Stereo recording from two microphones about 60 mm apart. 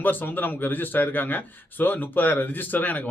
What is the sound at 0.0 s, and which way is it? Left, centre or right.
A man's voice, left.